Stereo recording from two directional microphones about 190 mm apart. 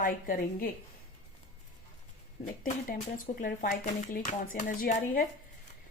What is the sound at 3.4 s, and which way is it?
Speech, 50° left (ahead or behind).